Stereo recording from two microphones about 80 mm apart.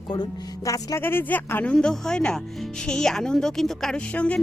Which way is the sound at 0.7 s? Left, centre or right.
Left.